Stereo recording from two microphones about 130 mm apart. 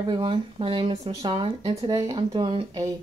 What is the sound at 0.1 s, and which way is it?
Speech, 40° right (ahead or behind).